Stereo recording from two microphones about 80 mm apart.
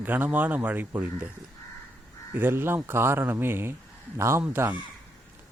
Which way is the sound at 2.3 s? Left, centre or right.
Right.